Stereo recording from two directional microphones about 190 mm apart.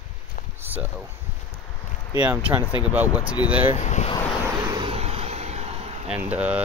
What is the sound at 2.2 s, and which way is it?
Speech, 10° right (ahead or behind).